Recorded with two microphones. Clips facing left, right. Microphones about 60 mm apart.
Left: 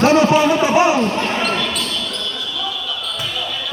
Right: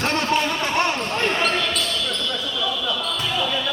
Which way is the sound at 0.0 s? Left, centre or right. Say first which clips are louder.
Left 9 dB; centre.